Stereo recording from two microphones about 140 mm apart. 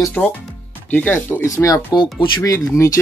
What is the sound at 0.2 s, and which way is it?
Speech, centre (ahead or behind).